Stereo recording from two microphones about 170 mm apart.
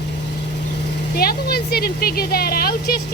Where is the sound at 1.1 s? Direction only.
65° left (ahead or behind).